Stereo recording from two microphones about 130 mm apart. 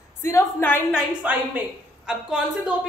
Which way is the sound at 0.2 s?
20° left (ahead or behind).